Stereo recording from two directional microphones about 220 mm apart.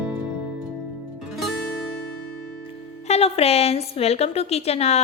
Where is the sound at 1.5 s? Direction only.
Centre (ahead or behind).